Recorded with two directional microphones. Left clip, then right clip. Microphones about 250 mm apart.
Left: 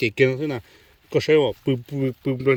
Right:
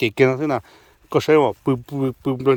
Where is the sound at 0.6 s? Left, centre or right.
Centre.